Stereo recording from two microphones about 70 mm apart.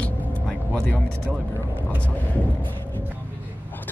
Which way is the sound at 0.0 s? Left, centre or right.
Left.